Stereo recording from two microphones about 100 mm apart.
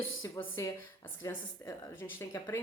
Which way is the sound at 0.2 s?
35° left (ahead or behind).